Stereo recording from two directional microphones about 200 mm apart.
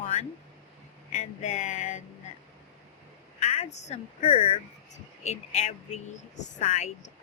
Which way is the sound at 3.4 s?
35° left (ahead or behind).